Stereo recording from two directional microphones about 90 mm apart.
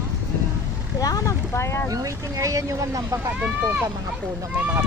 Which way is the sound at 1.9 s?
40° right (ahead or behind).